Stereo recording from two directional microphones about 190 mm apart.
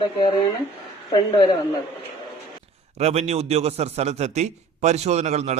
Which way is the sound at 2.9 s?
35° right (ahead or behind).